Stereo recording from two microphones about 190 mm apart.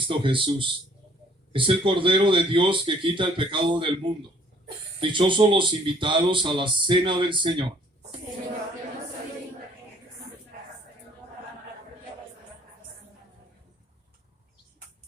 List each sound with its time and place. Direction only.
0.1 s speech: 25° right (ahead or behind)